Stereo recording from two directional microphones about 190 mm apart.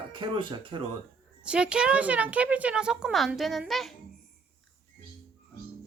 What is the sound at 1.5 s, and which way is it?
A woman's voice, 5° right (ahead or behind).